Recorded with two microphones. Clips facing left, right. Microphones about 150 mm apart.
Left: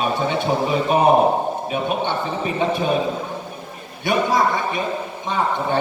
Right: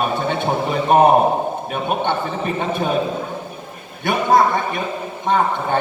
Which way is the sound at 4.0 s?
55° right (ahead or behind).